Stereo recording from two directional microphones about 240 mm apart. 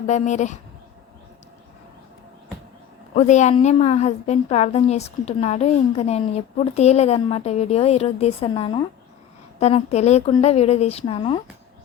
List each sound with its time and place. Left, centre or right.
0.1 s a woman's voice: left
3.2 s a woman's voice: left